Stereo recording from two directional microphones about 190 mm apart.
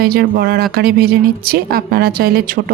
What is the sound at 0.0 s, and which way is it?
Speech, 55° right (ahead or behind).